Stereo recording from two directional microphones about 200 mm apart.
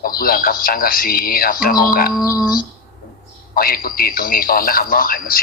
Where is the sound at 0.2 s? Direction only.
45° left (ahead or behind).